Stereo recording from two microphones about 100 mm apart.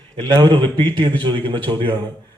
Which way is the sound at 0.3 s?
50° right (ahead or behind).